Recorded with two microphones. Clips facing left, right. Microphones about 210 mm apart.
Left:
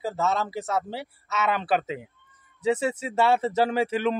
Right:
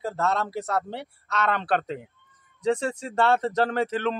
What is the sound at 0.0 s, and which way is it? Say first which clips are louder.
A man's voice: even; centre (ahead or behind).